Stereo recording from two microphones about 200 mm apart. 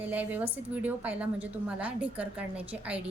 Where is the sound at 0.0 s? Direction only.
10° right (ahead or behind).